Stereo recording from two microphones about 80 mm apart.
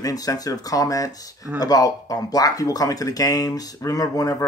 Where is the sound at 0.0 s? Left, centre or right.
Left.